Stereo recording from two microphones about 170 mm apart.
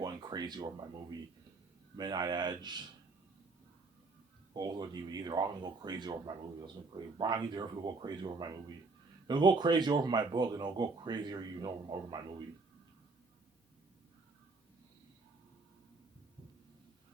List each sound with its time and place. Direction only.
0.0 s a sound: 25° right (ahead or behind)
2.0 s speech: 25° right (ahead or behind)
4.5 s speech: 25° right (ahead or behind)